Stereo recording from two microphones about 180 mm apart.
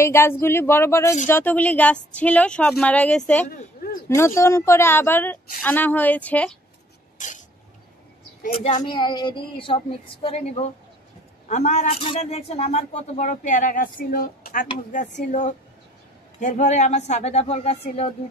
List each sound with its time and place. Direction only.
0.0 s speech: 15° left (ahead or behind)
3.8 s a sound: 55° left (ahead or behind)
4.4 s speech: 15° left (ahead or behind)
7.2 s a sound: 45° left (ahead or behind)
8.5 s speech: 40° left (ahead or behind)
8.8 s a woman's voice: 25° left (ahead or behind)